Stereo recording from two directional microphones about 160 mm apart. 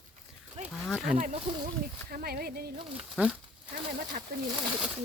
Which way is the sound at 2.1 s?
75° right (ahead or behind).